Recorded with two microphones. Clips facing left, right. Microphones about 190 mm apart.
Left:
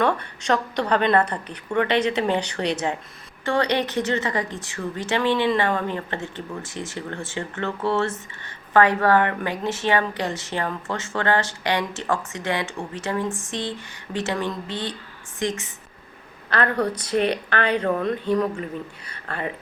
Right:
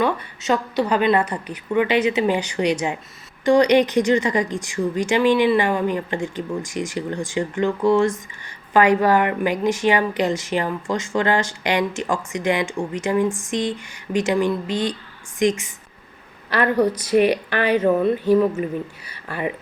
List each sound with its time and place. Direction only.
0.0 s a woman's voice: 5° right (ahead or behind)